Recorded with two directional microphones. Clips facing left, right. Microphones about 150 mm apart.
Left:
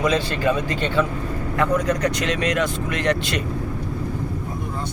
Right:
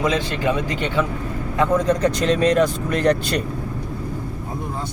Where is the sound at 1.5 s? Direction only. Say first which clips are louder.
Right 3 dB; 30° right (ahead or behind).